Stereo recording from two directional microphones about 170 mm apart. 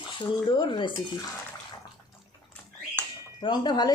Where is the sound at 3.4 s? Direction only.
25° left (ahead or behind).